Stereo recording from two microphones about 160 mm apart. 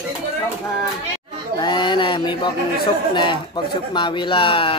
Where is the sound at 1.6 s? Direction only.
30° left (ahead or behind).